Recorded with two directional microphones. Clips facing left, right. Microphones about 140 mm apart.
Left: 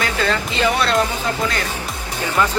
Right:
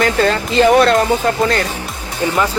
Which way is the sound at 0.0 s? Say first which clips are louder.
Right 6 dB; 40° right (ahead or behind).